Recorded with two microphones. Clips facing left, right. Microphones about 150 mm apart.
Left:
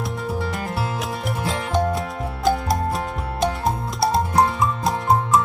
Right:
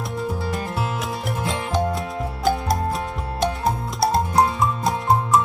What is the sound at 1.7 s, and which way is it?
Music, centre (ahead or behind).